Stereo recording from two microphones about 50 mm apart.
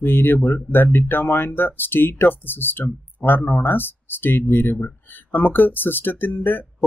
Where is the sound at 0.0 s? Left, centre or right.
Left.